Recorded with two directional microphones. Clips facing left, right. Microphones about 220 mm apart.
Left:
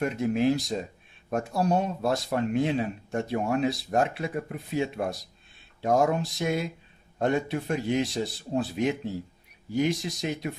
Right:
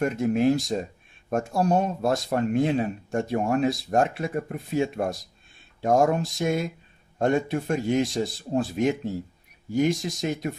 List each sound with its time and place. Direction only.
0.0 s speech: 45° right (ahead or behind)